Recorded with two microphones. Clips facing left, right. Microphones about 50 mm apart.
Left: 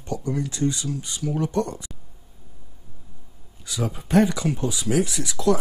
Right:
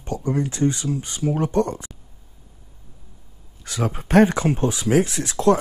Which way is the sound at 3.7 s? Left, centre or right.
Right.